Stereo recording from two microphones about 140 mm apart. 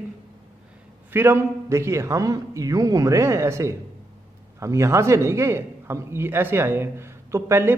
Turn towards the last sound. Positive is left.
turn(degrees=-15)  # may be behind; listen again after turning